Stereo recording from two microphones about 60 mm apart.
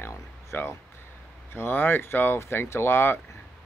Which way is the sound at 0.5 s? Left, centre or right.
Left.